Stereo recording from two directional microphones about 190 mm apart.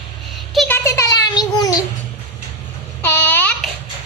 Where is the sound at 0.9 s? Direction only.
15° left (ahead or behind).